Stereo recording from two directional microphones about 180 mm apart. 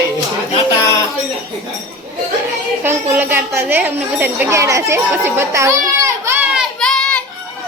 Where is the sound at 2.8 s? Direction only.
10° right (ahead or behind).